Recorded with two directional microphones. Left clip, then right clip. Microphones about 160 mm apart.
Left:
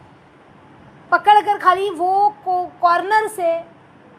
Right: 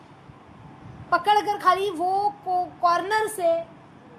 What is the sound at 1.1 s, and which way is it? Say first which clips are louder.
A woman's voice: left 8 dB; 20° left (ahead or behind).